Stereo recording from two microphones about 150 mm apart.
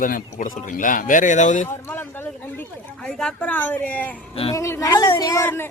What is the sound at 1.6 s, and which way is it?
A woman's voice, 15° left (ahead or behind).